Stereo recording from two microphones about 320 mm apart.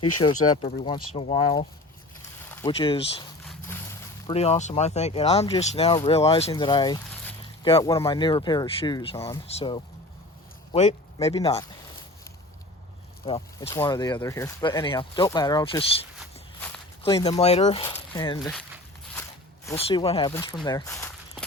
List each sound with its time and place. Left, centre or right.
1.1 s speech: centre
3.4 s a sound: centre
4.3 s speech: centre
13.2 s speech: centre
17.0 s speech: centre
18.5 s walk: centre
19.6 s speech: centre